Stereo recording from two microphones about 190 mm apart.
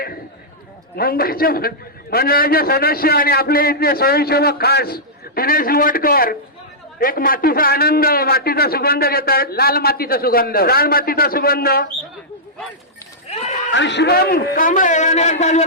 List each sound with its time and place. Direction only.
0.9 s a man's voice: 50° left (ahead or behind)
13.7 s a man's voice: 65° left (ahead or behind); by 15.6 s 35° left (ahead or behind)